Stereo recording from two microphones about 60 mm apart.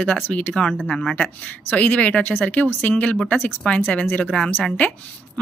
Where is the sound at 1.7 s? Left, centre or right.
Left.